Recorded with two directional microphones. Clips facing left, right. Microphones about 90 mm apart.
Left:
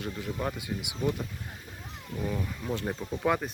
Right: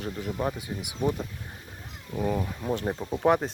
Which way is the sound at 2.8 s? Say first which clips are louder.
Right 5 dB; 20° right (ahead or behind).